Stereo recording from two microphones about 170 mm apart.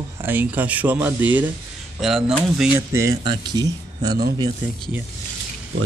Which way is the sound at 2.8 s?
15° right (ahead or behind).